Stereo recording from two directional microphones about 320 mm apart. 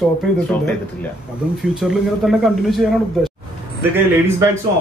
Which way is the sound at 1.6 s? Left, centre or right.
Centre.